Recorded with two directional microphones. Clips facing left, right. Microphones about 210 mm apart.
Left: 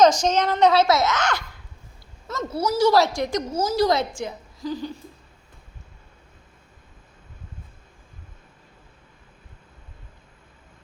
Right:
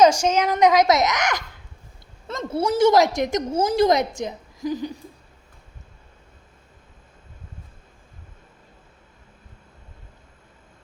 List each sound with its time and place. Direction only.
0.0 s a child's voice: 10° right (ahead or behind)
2.5 s a woman's voice: 25° right (ahead or behind)